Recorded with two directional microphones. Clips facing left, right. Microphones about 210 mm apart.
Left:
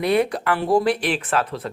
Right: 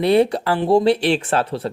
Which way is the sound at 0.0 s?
30° right (ahead or behind).